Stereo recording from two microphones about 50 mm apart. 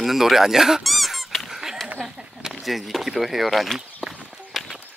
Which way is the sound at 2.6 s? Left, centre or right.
Centre.